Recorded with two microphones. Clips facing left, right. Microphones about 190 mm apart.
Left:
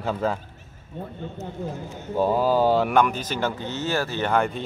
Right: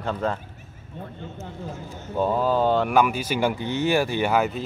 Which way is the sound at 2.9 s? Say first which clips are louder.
Right 1 dB; 10° right (ahead or behind).